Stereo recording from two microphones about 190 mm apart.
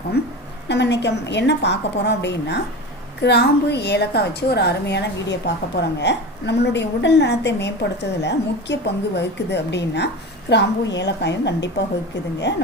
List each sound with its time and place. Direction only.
0.2 s a woman's voice: 60° left (ahead or behind)